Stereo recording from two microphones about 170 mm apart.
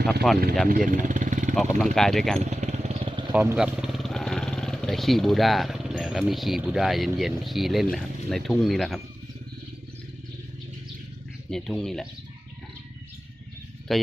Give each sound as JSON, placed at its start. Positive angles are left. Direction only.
{"t": 0.0, "sound": "speech", "side_deg": 0}
{"t": 0.9, "sound": "vehicle", "side_deg": -45}
{"t": 1.8, "sound": "speech", "side_deg": 0}
{"t": 2.4, "sound": "motorcycle", "side_deg": -40}
{"t": 3.3, "sound": "speech", "side_deg": -10}
{"t": 11.5, "sound": "speech", "side_deg": 0}
{"t": 13.9, "sound": "speech", "side_deg": 0}